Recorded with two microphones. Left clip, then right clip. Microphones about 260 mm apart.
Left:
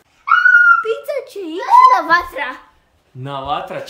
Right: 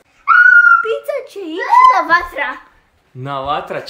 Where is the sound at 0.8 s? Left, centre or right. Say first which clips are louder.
Right 2 dB; centre.